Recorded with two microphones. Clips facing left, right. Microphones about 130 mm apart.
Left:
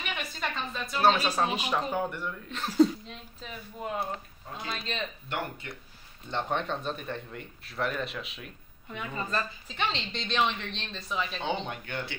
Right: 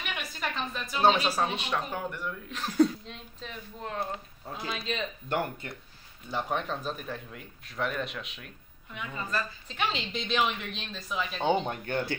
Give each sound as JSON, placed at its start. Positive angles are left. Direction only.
{"t": 0.0, "sound": "a sound", "side_deg": -5}
{"t": 0.9, "sound": "speech", "side_deg": -15}
{"t": 1.4, "sound": "a man's voice", "side_deg": 5}
{"t": 5.6, "sound": "speech", "side_deg": -40}
{"t": 6.3, "sound": "a man's voice", "side_deg": -5}
{"t": 8.9, "sound": "a woman's voice", "side_deg": 35}
{"t": 9.7, "sound": "a man's voice", "side_deg": -5}
{"t": 11.6, "sound": "speech", "side_deg": -40}